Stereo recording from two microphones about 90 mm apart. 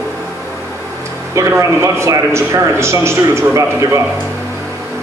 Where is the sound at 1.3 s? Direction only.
35° right (ahead or behind).